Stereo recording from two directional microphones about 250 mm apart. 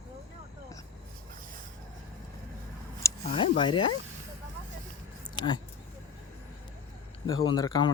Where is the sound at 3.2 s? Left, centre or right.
Left.